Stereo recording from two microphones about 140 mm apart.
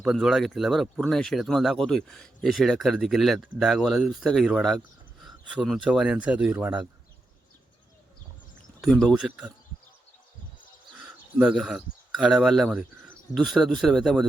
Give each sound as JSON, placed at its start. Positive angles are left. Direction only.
{"t": 0.0, "sound": "speech", "side_deg": 0}
{"t": 8.8, "sound": "speech", "side_deg": 0}
{"t": 11.0, "sound": "speech", "side_deg": -5}